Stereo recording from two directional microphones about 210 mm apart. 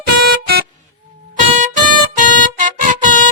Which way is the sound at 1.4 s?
40° right (ahead or behind).